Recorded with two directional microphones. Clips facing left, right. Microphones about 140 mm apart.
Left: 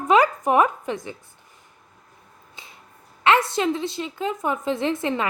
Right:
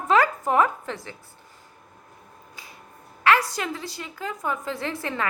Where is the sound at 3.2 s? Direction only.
25° left (ahead or behind).